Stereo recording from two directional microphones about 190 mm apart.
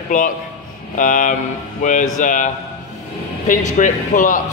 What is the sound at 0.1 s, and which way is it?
A man's voice, 40° left (ahead or behind).